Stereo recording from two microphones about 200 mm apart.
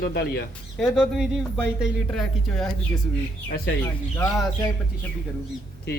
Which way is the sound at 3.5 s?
50° left (ahead or behind).